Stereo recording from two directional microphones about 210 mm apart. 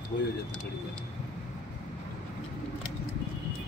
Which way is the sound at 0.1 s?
40° left (ahead or behind).